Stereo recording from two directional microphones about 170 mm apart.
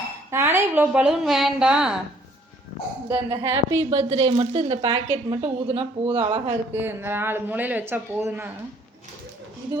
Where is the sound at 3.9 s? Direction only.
40° right (ahead or behind).